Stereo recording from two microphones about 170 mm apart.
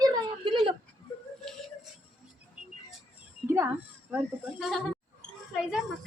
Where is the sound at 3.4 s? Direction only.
15° right (ahead or behind).